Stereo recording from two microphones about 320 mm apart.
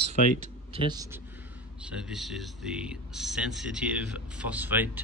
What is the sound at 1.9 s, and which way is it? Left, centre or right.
A man's voice, centre.